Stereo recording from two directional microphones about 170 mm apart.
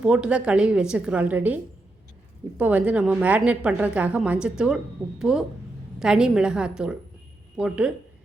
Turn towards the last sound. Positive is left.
turn(degrees=-5)  # may be behind; listen again after turning